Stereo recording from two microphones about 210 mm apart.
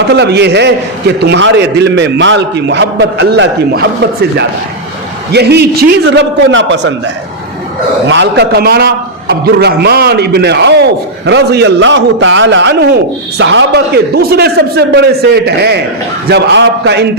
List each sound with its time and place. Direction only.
0.1 s a man's voice: 55° right (ahead or behind)
8.0 s a man's voice: 60° right (ahead or behind)